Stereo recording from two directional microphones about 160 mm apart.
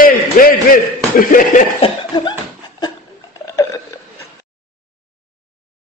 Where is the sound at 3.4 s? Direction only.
20° left (ahead or behind).